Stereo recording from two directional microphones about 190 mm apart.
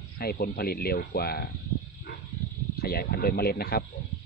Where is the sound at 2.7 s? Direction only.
55° left (ahead or behind).